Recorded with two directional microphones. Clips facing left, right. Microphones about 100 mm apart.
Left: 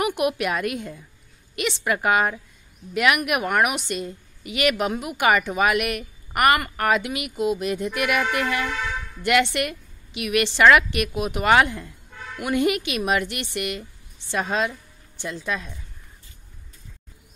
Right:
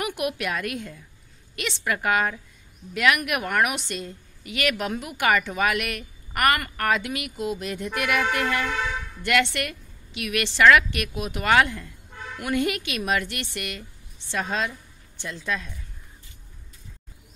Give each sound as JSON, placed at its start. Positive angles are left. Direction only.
{"t": 0.0, "sound": "a woman's voice", "side_deg": 20}
{"t": 15.1, "sound": "a woman's voice", "side_deg": 15}